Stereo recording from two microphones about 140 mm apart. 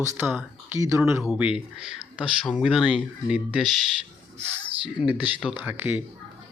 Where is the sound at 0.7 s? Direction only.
20° right (ahead or behind).